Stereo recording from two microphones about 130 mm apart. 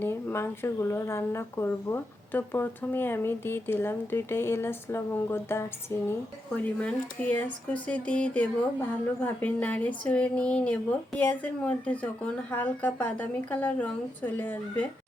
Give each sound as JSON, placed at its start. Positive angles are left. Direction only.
{"t": 0.0, "sound": "a woman's voice", "side_deg": 15}
{"t": 6.7, "sound": "speech", "side_deg": 10}